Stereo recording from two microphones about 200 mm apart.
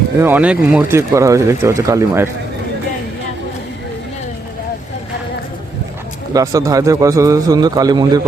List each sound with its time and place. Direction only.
0.2 s speech: 10° right (ahead or behind)
6.3 s speech: 15° right (ahead or behind)